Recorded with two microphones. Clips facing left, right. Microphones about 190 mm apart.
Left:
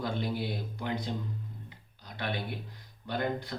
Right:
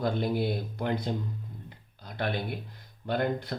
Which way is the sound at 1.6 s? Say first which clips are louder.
Right 3 dB; 55° right (ahead or behind).